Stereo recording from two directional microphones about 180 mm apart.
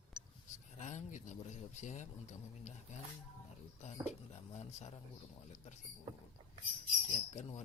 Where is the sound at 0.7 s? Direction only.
40° left (ahead or behind).